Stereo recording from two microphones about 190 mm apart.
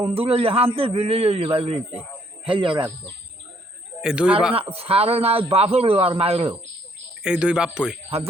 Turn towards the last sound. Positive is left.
turn(degrees=-5)  # may be behind; listen again after turning